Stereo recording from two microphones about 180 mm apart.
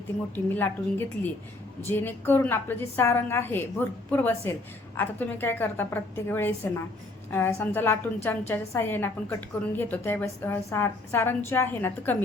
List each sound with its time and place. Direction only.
0.3 s a woman's voice: 10° left (ahead or behind)